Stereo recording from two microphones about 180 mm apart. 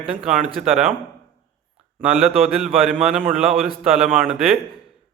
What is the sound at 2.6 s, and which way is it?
Speech, centre (ahead or behind).